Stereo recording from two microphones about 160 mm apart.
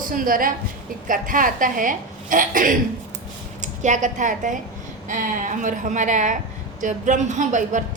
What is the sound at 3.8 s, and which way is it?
A woman's voice, 50° right (ahead or behind).